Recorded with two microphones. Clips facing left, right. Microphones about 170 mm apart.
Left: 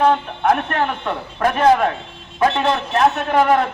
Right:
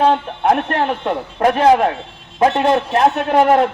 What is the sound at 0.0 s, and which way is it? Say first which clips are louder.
A man's voice: right 1 dB; 30° right (ahead or behind).